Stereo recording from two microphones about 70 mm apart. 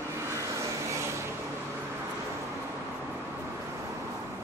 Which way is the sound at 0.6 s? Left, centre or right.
Right.